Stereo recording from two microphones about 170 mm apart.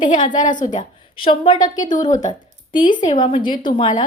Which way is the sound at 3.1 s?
30° left (ahead or behind).